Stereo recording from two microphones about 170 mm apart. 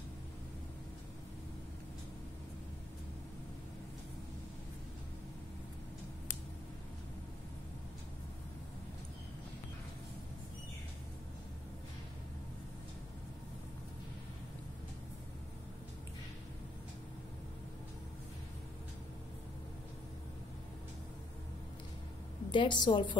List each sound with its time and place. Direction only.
22.5 s a woman's voice: 25° left (ahead or behind)